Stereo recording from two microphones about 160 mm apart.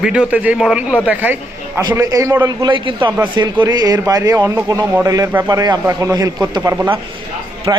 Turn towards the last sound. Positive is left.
turn(degrees=-20)  # may be behind; listen again after turning